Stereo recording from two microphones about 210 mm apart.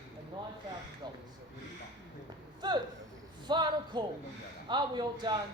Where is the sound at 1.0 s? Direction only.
20° right (ahead or behind).